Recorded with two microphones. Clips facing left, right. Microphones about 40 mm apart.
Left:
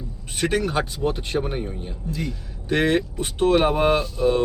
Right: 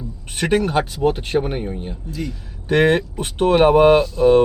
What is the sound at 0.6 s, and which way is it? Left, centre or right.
Speech, right.